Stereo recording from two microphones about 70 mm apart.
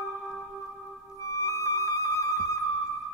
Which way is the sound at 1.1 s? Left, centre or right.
Left.